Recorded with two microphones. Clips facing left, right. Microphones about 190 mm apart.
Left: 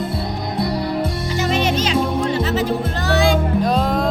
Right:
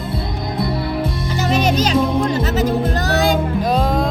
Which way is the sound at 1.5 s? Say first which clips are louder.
Right 3 dB; 40° right (ahead or behind).